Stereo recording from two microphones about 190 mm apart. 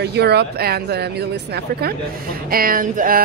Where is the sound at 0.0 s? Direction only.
60° right (ahead or behind).